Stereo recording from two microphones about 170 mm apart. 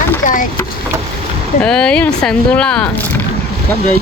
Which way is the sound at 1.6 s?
5° left (ahead or behind).